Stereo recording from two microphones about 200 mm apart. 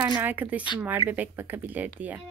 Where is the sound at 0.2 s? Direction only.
10° right (ahead or behind).